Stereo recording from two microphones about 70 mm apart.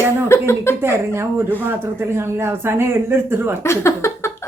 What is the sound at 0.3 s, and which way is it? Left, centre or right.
Speech, left.